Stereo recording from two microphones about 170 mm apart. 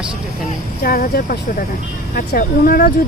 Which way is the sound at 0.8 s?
60° left (ahead or behind).